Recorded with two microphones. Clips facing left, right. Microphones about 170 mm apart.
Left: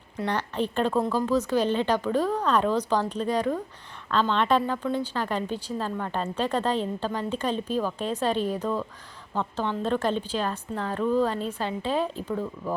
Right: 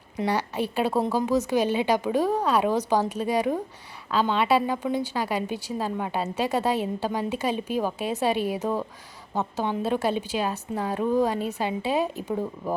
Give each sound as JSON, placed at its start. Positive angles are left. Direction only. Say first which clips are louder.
{"t": 0.2, "sound": "a woman's voice", "louder": "right 2 dB", "side_deg": -10}